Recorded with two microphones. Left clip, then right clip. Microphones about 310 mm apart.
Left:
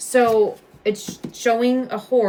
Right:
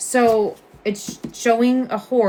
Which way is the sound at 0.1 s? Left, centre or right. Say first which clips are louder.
Even; centre.